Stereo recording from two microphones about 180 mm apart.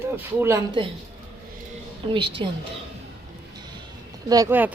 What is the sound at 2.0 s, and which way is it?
Speech, 25° right (ahead or behind).